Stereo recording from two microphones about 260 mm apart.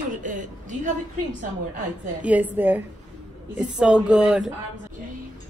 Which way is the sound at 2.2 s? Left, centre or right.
Centre.